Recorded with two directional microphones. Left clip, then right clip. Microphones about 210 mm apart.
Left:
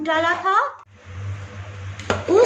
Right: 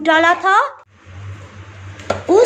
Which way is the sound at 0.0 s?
40° right (ahead or behind).